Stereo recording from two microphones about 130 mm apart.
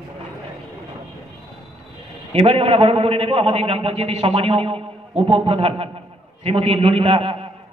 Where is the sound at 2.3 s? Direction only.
45° right (ahead or behind).